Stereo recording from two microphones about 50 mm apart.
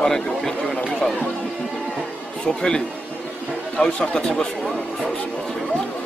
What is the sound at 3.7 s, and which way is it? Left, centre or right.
Speech, left.